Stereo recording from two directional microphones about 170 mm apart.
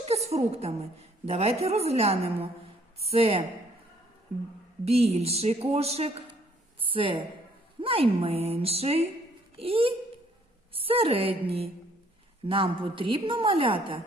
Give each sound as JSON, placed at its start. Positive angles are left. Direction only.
{"t": 0.0, "sound": "a woman's voice", "side_deg": -40}
{"t": 4.9, "sound": "a woman's voice", "side_deg": -35}